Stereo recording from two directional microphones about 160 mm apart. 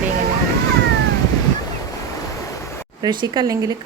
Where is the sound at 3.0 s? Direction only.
30° right (ahead or behind).